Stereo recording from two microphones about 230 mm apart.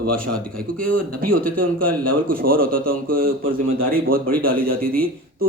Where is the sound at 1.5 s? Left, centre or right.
Right.